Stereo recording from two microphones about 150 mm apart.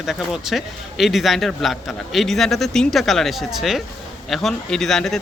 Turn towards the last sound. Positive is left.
turn(degrees=0)  # may be behind; listen again after turning